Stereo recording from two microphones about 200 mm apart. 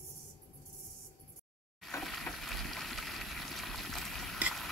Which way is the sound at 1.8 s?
Centre (ahead or behind).